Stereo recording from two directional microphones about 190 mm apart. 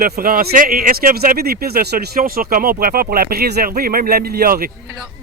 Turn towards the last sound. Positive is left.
turn(degrees=-50)  # may be behind; listen again after turning